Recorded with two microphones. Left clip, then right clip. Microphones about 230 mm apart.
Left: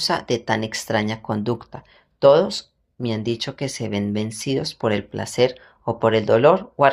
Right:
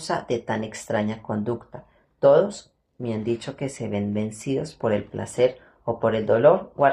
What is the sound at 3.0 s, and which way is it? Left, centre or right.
Speech, left.